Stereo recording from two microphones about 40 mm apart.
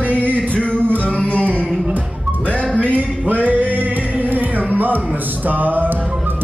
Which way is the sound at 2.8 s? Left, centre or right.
Right.